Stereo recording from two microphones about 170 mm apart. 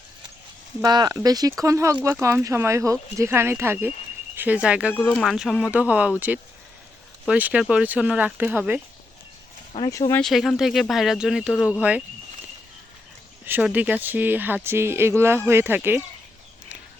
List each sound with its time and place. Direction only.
0.8 s speech: 25° right (ahead or behind); by 4.9 s 5° right (ahead or behind)
4.9 s speech: 10° left (ahead or behind); by 8.8 s 10° right (ahead or behind)
9.7 s speech: 25° left (ahead or behind)
10.1 s speech: 5° left (ahead or behind)
13.4 s speech: 10° right (ahead or behind)